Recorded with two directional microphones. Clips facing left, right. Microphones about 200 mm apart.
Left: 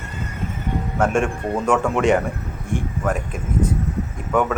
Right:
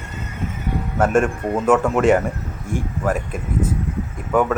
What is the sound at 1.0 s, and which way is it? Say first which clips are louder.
Speech: right 3 dB; 5° right (ahead or behind).